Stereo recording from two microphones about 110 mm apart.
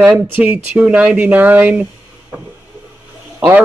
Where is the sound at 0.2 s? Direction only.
15° right (ahead or behind).